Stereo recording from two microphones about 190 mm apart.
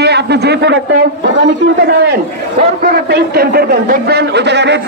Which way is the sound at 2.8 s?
55° right (ahead or behind).